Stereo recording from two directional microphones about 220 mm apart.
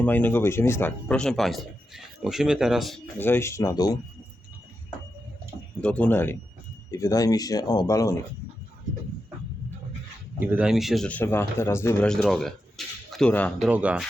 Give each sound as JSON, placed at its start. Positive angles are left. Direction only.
{"t": 0.0, "sound": "speech", "side_deg": 5}
{"t": 5.8, "sound": "speech", "side_deg": 5}
{"t": 10.4, "sound": "speech", "side_deg": -5}
{"t": 13.7, "sound": "speech", "side_deg": -5}